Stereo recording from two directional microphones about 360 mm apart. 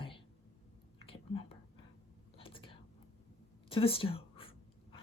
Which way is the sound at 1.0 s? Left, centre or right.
Centre.